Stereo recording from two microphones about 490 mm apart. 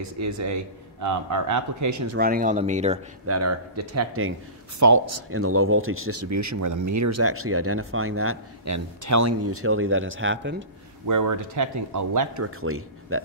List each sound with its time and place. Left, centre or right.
0.0 s speech: right
2.1 s speech: centre
3.3 s speech: right
11.1 s speech: right
12.4 s a man's voice: right